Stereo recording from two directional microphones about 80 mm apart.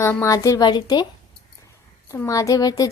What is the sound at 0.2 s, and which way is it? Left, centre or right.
Speech, left.